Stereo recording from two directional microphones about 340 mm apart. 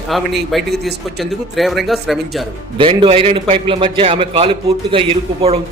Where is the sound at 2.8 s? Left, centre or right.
Centre.